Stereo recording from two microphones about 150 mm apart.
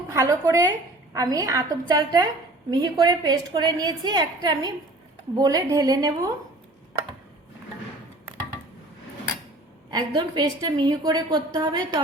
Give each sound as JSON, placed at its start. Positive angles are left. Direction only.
{"t": 0.1, "sound": "a woman's voice", "side_deg": -20}
{"t": 9.9, "sound": "a woman's voice", "side_deg": -30}